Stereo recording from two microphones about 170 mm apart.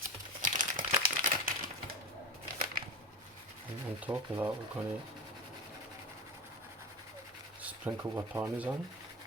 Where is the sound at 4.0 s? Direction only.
10° right (ahead or behind).